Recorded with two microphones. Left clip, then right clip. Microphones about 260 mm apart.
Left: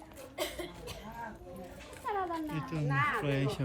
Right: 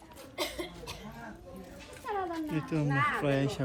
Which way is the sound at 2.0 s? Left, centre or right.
Left.